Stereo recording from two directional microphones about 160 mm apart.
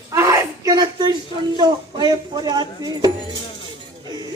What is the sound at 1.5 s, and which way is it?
A man's voice, 25° right (ahead or behind).